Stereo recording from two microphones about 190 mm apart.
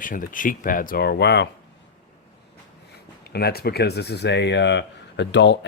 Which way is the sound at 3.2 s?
55° left (ahead or behind).